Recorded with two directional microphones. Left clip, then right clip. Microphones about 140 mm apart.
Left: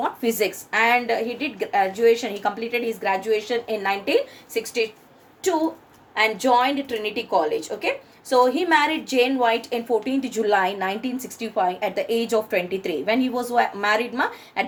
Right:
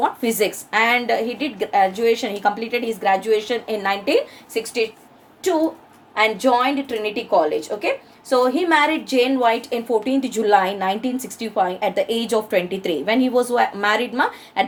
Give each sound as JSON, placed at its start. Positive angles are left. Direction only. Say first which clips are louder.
{"t": 0.0, "sound": "a woman's voice", "louder": "right 3 dB", "side_deg": -35}